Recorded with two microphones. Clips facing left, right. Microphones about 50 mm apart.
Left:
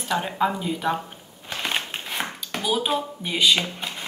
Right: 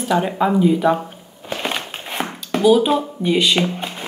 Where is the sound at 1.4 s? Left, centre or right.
Centre.